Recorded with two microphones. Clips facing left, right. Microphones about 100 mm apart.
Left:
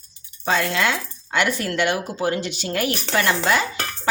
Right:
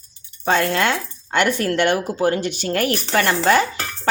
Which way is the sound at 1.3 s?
50° right (ahead or behind).